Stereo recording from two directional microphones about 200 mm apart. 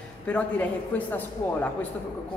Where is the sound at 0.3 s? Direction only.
5° left (ahead or behind).